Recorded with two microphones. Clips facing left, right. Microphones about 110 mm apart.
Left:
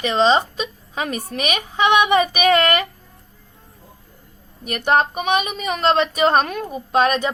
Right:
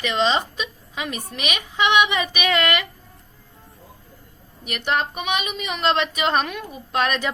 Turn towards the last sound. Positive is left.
turn(degrees=35)  # may be behind; listen again after turning